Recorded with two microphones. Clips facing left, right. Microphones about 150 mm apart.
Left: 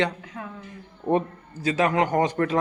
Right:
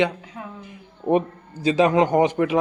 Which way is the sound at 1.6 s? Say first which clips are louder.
Right 5 dB; 20° right (ahead or behind).